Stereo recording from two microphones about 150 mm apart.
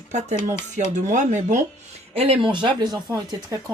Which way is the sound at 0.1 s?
50° right (ahead or behind).